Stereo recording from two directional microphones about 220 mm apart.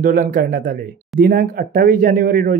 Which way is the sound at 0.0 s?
40° right (ahead or behind).